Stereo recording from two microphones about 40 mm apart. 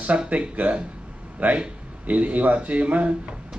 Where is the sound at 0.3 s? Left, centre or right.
Right.